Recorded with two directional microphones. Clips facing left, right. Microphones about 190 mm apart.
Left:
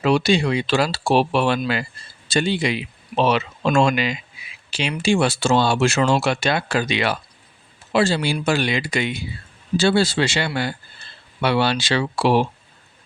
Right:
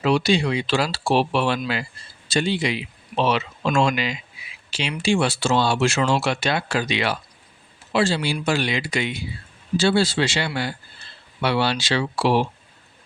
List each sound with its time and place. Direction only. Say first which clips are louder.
0.0 s speech: left 2 dB; 50° left (ahead or behind)